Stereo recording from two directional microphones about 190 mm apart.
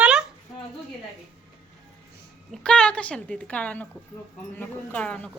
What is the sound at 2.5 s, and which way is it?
A woman's voice, 5° left (ahead or behind).